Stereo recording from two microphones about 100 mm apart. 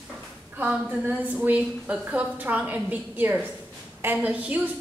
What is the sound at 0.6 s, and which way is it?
A woman's voice, 15° right (ahead or behind).